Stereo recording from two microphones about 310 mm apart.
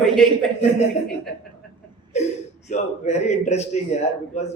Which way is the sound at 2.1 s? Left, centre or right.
Left.